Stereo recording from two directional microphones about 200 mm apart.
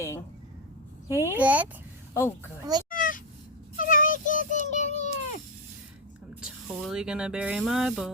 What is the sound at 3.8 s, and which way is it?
Child singing, 40° left (ahead or behind).